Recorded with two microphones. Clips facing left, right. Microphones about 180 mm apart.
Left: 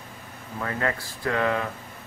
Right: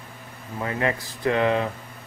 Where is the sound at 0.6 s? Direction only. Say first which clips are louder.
Right 2 dB; 20° right (ahead or behind).